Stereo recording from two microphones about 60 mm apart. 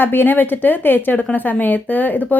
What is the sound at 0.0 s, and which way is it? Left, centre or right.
A woman's voice, left.